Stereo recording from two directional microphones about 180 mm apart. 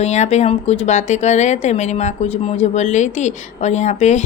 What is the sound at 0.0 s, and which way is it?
Speech, 40° left (ahead or behind).